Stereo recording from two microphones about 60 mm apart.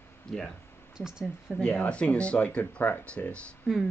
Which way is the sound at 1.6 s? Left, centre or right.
Left.